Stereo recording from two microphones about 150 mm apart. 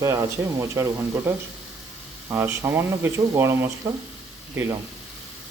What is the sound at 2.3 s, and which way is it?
Speech, 15° right (ahead or behind).